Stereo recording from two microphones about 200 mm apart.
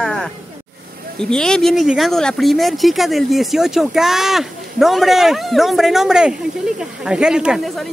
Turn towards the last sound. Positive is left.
turn(degrees=0)  # may be behind; listen again after turning